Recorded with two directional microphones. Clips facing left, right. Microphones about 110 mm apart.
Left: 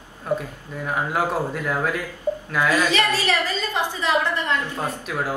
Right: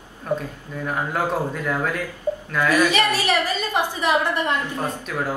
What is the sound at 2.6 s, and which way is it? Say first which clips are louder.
A woman's voice: right 2 dB; 15° right (ahead or behind).